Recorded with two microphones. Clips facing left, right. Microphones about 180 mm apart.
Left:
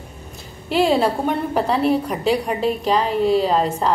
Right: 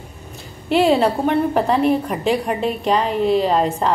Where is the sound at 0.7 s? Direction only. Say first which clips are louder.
Right 2 dB; 5° left (ahead or behind).